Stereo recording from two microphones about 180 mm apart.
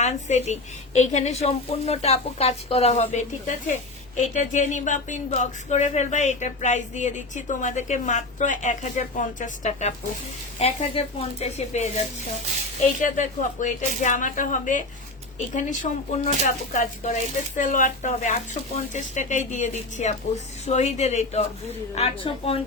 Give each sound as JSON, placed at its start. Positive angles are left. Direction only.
{"t": 0.0, "sound": "speech", "side_deg": 40}